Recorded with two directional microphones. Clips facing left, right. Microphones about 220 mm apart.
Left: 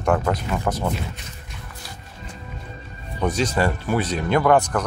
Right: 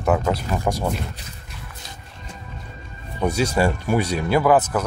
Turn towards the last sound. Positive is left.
turn(degrees=-5)  # may be behind; listen again after turning